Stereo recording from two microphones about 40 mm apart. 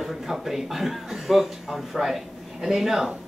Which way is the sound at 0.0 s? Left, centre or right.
Centre.